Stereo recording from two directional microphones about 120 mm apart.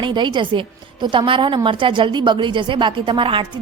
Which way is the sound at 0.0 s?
40° right (ahead or behind).